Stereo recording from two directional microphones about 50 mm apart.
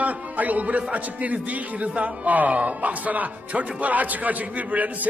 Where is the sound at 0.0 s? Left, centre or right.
Right.